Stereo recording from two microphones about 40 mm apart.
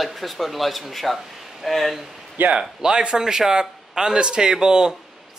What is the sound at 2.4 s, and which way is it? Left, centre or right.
Speech, right.